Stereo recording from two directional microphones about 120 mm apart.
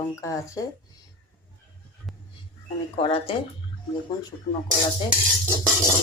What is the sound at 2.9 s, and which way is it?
Speech, 50° left (ahead or behind).